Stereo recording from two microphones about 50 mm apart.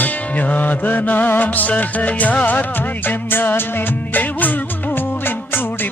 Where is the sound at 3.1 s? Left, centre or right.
Left.